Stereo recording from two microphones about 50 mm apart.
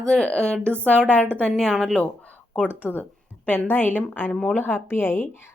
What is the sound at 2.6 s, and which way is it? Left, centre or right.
A woman's voice, left.